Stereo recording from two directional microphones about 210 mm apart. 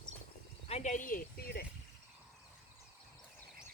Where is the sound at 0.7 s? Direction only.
30° left (ahead or behind).